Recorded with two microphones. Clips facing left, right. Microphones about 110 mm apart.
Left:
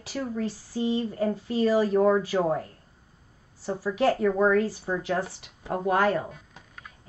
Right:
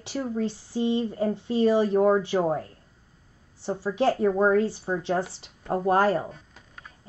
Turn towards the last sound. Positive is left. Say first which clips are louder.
# right 2 dB
turn(degrees=-35)  # may be behind; listen again after turning